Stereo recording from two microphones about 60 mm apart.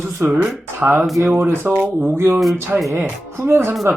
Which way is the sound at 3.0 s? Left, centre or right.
Right.